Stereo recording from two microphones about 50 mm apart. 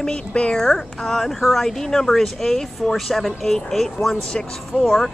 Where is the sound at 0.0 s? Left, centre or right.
Centre.